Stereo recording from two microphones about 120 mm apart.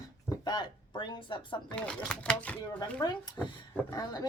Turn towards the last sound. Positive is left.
turn(degrees=35)  # may be behind; listen again after turning